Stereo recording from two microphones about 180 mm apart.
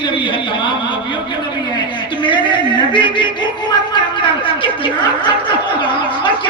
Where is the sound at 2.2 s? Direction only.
25° left (ahead or behind).